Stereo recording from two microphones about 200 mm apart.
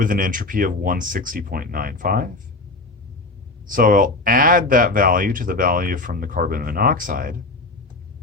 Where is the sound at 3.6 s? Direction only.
45° right (ahead or behind).